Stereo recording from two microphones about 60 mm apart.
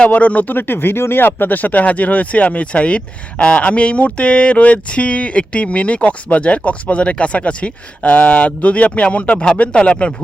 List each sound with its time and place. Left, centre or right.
0.0 s speech: left